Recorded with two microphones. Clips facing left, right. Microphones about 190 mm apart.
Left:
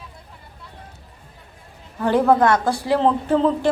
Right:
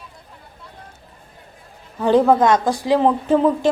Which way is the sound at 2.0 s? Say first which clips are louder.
Right 2 dB; 15° right (ahead or behind).